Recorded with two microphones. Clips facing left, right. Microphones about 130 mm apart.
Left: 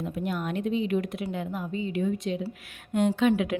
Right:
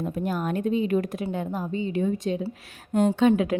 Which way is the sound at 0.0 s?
40° right (ahead or behind).